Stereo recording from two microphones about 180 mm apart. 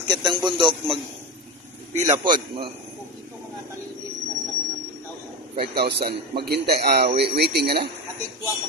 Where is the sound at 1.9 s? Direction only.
40° right (ahead or behind).